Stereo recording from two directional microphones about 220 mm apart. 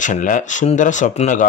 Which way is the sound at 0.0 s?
35° left (ahead or behind).